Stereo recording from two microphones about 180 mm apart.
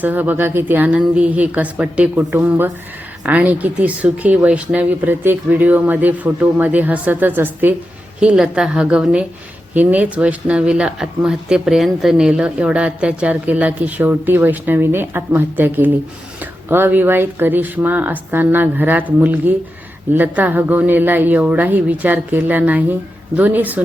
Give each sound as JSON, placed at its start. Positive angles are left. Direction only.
{"t": 0.0, "sound": "a woman's voice", "side_deg": -10}